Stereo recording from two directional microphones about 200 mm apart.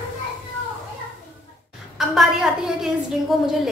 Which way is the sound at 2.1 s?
Centre (ahead or behind).